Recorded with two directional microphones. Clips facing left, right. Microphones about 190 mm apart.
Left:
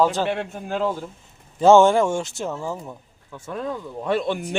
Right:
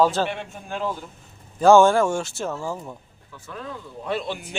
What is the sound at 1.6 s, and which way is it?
Speech, 20° left (ahead or behind).